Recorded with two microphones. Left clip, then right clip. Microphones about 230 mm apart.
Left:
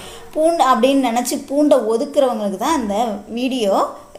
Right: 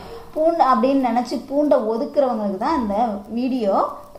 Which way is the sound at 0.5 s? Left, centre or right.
Left.